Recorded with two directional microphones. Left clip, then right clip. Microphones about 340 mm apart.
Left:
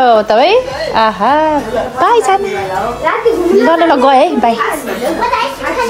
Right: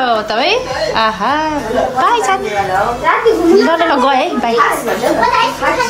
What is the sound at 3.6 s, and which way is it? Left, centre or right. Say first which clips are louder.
A woman's voice: left 2 dB; centre.